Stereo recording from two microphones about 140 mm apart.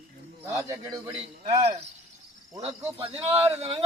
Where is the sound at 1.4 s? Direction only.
50° right (ahead or behind).